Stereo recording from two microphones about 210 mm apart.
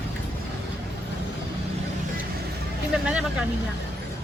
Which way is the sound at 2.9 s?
5° right (ahead or behind).